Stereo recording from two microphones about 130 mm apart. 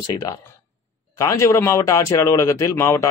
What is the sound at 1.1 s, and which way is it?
Speech, 25° left (ahead or behind).